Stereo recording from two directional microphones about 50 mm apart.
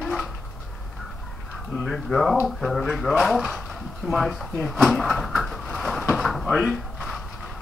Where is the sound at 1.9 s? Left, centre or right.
Centre.